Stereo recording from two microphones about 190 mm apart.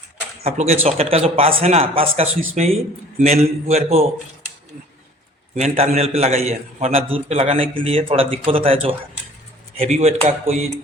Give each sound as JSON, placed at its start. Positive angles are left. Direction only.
{"t": 0.4, "sound": "a man's voice", "side_deg": -35}
{"t": 5.5, "sound": "a man's voice", "side_deg": -35}